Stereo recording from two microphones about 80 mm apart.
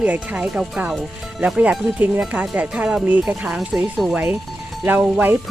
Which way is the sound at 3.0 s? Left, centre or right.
Right.